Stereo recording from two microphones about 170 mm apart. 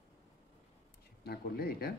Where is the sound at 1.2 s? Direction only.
65° left (ahead or behind).